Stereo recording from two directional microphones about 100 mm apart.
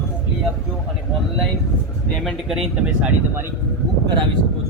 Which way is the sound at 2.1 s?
Centre (ahead or behind).